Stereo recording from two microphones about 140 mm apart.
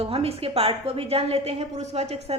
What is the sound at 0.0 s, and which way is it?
A woman's voice, 45° right (ahead or behind).